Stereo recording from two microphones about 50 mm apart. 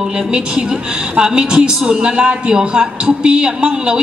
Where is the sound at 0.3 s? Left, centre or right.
Centre.